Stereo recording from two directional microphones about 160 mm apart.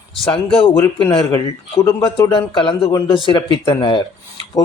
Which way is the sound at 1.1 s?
35° left (ahead or behind).